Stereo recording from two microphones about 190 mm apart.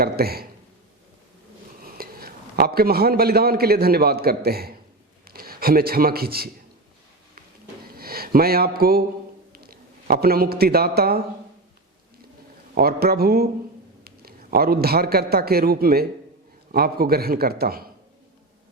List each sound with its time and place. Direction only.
0.0 s speech: 55° right (ahead or behind)
1.8 s a man's voice: 50° right (ahead or behind)
7.9 s a man's voice: 50° right (ahead or behind)
12.7 s a man's voice: 55° right (ahead or behind)